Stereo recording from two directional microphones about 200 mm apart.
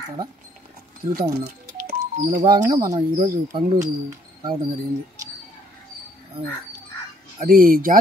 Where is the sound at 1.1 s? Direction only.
50° right (ahead or behind).